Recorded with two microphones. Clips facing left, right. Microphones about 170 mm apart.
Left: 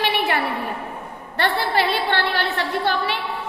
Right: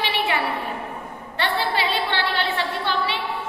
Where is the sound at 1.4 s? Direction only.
50° left (ahead or behind).